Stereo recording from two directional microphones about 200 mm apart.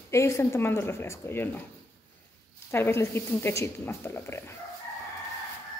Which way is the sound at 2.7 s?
10° left (ahead or behind).